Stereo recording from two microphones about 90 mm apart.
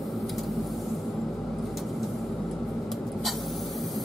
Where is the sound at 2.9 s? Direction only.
Centre (ahead or behind).